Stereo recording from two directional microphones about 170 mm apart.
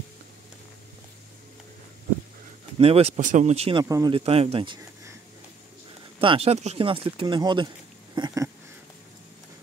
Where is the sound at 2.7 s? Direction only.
35° right (ahead or behind).